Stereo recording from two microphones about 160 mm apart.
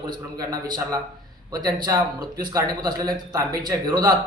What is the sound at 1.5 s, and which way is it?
A man's voice, 25° right (ahead or behind).